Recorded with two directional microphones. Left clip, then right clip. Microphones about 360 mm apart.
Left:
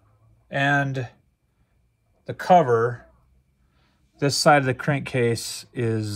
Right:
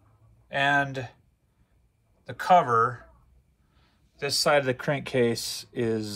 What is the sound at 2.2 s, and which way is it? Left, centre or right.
Speech, centre.